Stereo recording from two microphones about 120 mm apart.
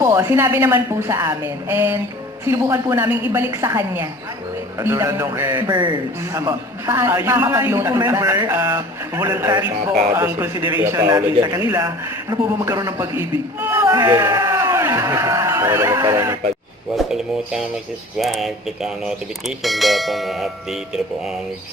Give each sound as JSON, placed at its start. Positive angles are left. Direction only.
{"t": 0.0, "sound": "a man's voice", "side_deg": -20}
{"t": 5.6, "sound": "a man's voice", "side_deg": -40}
{"t": 6.3, "sound": "a man's voice", "side_deg": -25}
{"t": 11.1, "sound": "a man's voice", "side_deg": -35}
{"t": 13.9, "sound": "a man's voice", "side_deg": -35}
{"t": 14.2, "sound": "a man's voice", "side_deg": -20}
{"t": 14.5, "sound": "a sound", "side_deg": -25}
{"t": 16.0, "sound": "speech", "side_deg": -35}
{"t": 16.9, "sound": "speech", "side_deg": -5}